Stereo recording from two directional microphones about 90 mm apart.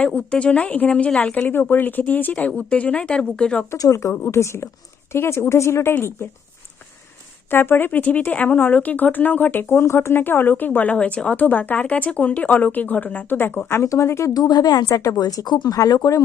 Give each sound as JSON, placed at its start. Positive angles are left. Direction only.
{"t": 0.0, "sound": "speech", "side_deg": 15}
{"t": 3.7, "sound": "speech", "side_deg": 35}
{"t": 7.5, "sound": "speech", "side_deg": 25}
{"t": 14.3, "sound": "speech", "side_deg": 45}